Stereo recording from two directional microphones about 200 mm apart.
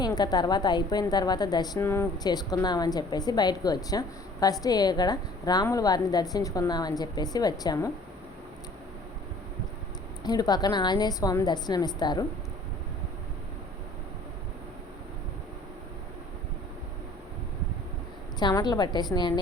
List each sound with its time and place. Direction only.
0.2 s a woman's voice: 20° left (ahead or behind)
10.2 s a woman's voice: 20° left (ahead or behind)
18.3 s a woman's voice: 20° left (ahead or behind)